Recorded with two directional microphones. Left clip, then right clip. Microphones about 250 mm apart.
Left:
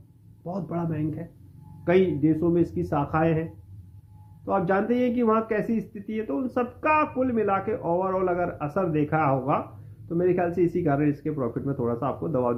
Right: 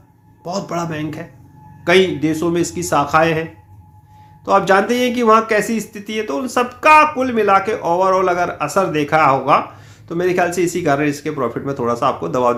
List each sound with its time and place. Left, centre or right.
0.4 s speech: centre
4.4 s speech: centre